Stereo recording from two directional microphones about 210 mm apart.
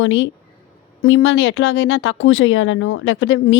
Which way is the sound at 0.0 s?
65° left (ahead or behind).